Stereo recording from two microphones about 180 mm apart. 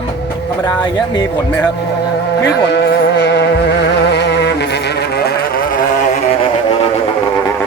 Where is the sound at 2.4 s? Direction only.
70° left (ahead or behind).